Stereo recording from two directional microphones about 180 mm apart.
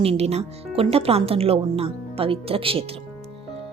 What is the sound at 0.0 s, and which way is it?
Speech, 35° right (ahead or behind).